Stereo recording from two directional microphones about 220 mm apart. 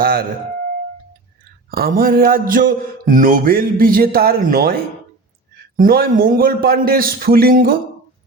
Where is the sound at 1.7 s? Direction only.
40° right (ahead or behind).